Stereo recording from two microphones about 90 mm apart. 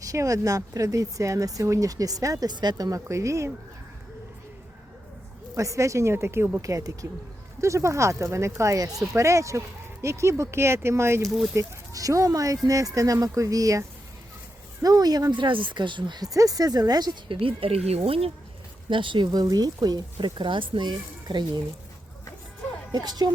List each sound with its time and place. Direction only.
0.0 s speech: 40° right (ahead or behind)
2.5 s speech: 50° right (ahead or behind); by 3.5 s 35° right (ahead or behind)
5.5 s speech: 35° right (ahead or behind)
11.3 s speech: centre (ahead or behind)
11.5 s speech: 40° right (ahead or behind)
15.4 s speech: 65° right (ahead or behind); by 17.3 s 50° right (ahead or behind)
17.4 s speech: 85° right
18.9 s speech: 65° right (ahead or behind)
22.9 s speech: 50° right (ahead or behind)